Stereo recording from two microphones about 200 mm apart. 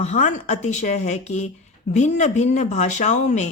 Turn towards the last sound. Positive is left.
turn(degrees=35)  # may be behind; listen again after turning